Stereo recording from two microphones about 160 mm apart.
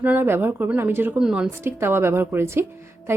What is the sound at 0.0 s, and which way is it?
A woman's voice, 15° right (ahead or behind).